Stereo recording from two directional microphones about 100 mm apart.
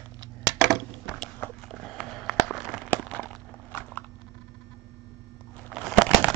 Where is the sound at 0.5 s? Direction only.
40° right (ahead or behind).